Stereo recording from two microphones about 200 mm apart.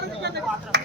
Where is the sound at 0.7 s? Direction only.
60° right (ahead or behind).